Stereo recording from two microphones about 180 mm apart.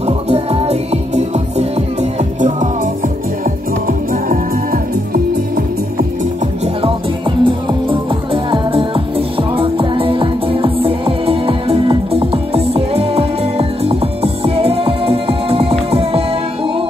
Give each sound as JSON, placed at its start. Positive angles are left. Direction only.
{"t": 0.0, "sound": "music", "side_deg": -35}
{"t": 7.4, "sound": "music", "side_deg": -30}